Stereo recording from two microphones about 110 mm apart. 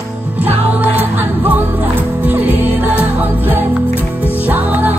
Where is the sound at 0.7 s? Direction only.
15° right (ahead or behind).